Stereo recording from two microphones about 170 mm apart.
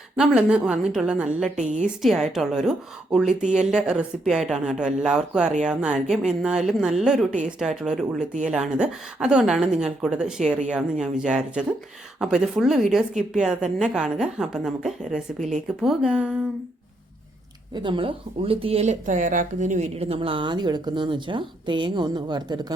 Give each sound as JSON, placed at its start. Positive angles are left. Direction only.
{"t": 0.2, "sound": "a woman's voice", "side_deg": -5}
{"t": 1.5, "sound": "a woman's voice", "side_deg": -45}
{"t": 2.0, "sound": "a woman's voice", "side_deg": 0}
{"t": 17.7, "sound": "speech", "side_deg": -30}